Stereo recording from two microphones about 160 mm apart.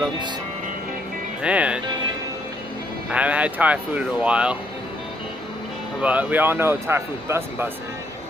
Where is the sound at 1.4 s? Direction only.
10° right (ahead or behind).